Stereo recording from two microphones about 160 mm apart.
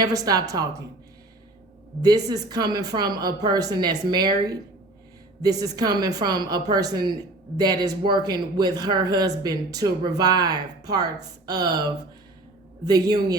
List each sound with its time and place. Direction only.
0.0 s speech: 20° right (ahead or behind)
2.0 s speech: 25° right (ahead or behind)
5.4 s speech: 25° right (ahead or behind)